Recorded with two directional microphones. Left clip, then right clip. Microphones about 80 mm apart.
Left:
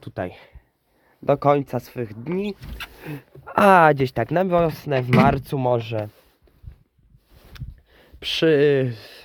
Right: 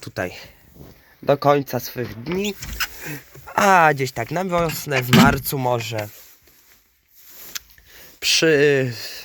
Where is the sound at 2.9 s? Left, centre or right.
Left.